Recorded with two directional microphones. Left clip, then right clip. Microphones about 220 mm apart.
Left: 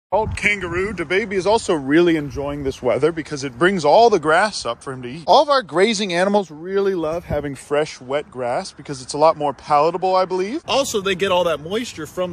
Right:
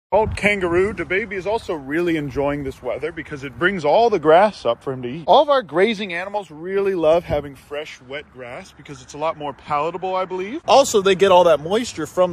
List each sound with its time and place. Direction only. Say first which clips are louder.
0.1 s speech: right 1 dB; centre (ahead or behind)
1.3 s speech: left 5 dB; 35° left (ahead or behind)
2.3 s speech: right 4 dB; 5° right (ahead or behind)
2.8 s speech: left 7 dB; 50° left (ahead or behind)
3.2 s speech: left 3 dB; 15° left (ahead or behind)
4.3 s speech: right 3 dB; centre (ahead or behind)
6.7 s speech: left 1 dB; 25° left (ahead or behind)
7.1 s speech: right 7 dB; 5° left (ahead or behind)
7.4 s speech: left 9 dB; 35° left (ahead or behind)
8.1 s speech: left 10 dB; 20° left (ahead or behind)
10.7 s speech: right 7 dB; centre (ahead or behind)